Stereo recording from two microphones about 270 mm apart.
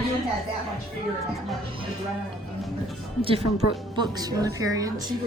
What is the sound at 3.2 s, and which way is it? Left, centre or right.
A woman's voice, right.